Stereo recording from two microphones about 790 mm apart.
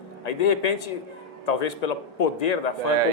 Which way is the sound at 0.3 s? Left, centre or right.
Left.